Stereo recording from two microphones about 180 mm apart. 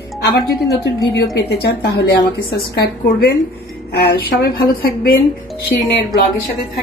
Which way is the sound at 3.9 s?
65° left (ahead or behind).